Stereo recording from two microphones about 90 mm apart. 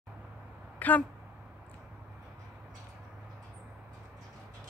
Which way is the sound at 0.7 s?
20° left (ahead or behind).